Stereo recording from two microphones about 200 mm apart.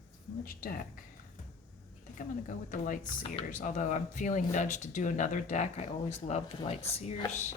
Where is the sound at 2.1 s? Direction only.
40° left (ahead or behind).